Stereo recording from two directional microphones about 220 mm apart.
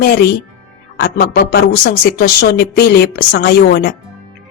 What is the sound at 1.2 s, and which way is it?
A woman's voice, 45° left (ahead or behind).